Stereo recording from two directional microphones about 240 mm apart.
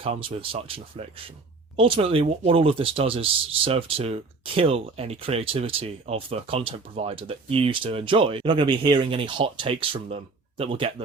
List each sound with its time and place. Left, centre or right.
0.0 s speech: right